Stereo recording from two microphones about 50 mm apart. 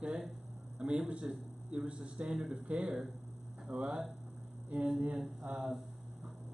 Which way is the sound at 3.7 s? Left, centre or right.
Right.